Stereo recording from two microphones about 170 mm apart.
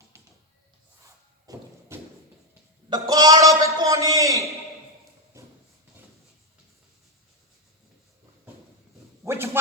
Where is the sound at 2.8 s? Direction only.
20° right (ahead or behind).